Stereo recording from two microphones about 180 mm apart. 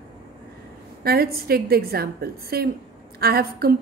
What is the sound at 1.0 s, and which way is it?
A woman's voice, 55° right (ahead or behind).